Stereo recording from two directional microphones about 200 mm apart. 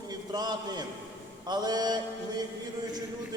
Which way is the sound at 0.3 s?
20° right (ahead or behind).